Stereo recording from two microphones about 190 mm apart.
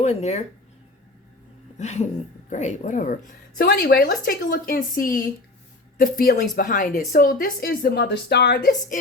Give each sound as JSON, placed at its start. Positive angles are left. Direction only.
{"t": 0.0, "sound": "speech", "side_deg": 35}
{"t": 1.8, "sound": "a woman's voice", "side_deg": 35}